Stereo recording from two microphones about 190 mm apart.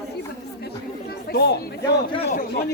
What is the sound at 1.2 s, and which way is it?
Speech, 55° left (ahead or behind).